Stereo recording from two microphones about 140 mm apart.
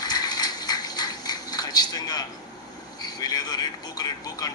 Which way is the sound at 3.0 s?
30° left (ahead or behind).